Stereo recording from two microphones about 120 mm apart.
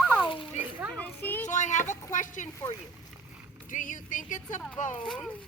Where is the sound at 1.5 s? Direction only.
90° left.